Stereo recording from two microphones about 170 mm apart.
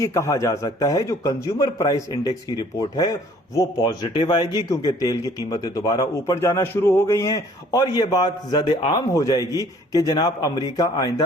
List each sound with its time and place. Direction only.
0.0 s a man's voice: 20° left (ahead or behind)